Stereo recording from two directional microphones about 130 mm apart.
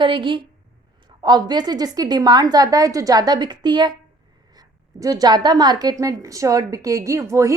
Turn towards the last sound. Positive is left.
turn(degrees=-20)  # may be behind; listen again after turning